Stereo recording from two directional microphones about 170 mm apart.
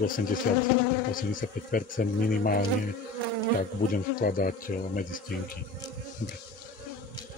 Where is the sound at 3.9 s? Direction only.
55° left (ahead or behind).